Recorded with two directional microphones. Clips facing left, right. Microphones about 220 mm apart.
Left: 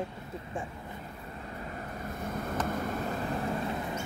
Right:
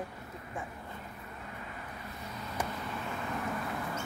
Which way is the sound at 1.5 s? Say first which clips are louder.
Left 7 dB; 40° left (ahead or behind).